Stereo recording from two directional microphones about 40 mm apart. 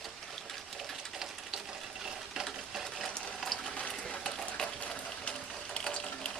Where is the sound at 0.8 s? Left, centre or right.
Centre.